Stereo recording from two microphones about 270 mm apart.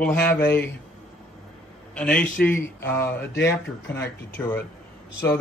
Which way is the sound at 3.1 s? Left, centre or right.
Left.